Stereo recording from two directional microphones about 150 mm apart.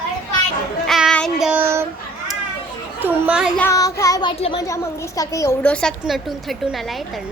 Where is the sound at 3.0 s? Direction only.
10° right (ahead or behind).